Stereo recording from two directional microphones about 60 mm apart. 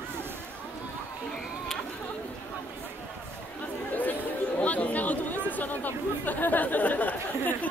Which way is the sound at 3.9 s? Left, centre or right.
Left.